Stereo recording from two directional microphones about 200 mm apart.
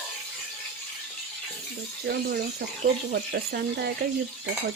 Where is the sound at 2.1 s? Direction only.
50° right (ahead or behind).